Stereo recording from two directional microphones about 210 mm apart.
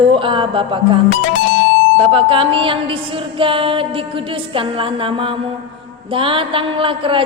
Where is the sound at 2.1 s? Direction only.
25° right (ahead or behind).